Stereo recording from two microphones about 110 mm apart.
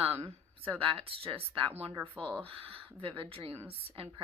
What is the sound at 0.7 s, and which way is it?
Speech, 55° right (ahead or behind).